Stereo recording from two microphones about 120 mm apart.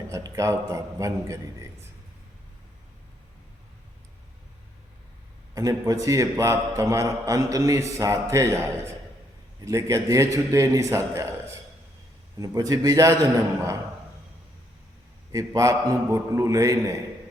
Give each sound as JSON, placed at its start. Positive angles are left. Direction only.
{"t": 0.1, "sound": "a man's voice", "side_deg": -25}
{"t": 5.5, "sound": "a man's voice", "side_deg": -30}
{"t": 15.3, "sound": "a man's voice", "side_deg": -25}